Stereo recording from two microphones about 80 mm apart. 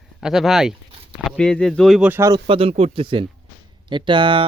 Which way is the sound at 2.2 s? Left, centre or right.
Right.